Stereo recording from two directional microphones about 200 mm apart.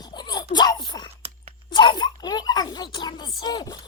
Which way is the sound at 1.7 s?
20° left (ahead or behind).